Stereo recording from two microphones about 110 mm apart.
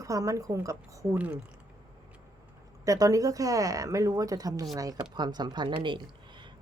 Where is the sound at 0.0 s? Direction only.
30° right (ahead or behind).